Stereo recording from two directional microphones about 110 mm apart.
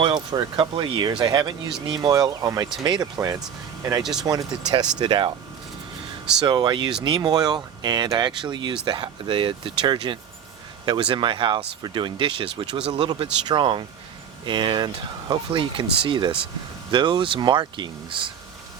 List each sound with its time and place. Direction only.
0.0 s speech: 45° right (ahead or behind)
4.0 s speech: 5° right (ahead or behind)
4.3 s speech: 35° right (ahead or behind)
6.4 s speech: 40° right (ahead or behind)